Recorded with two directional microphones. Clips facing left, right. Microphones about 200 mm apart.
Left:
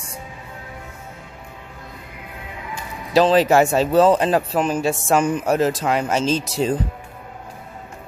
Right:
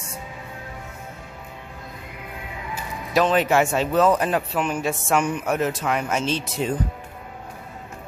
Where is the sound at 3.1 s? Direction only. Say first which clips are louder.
Left 4 dB; 30° left (ahead or behind).